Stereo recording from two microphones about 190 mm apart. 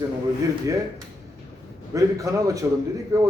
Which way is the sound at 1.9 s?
20° right (ahead or behind).